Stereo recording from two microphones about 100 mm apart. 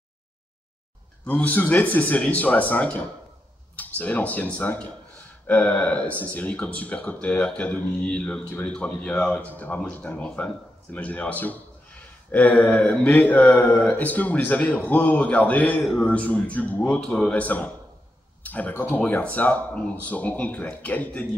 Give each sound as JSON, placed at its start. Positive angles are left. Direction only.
{"t": 1.2, "sound": "a man's voice", "side_deg": 15}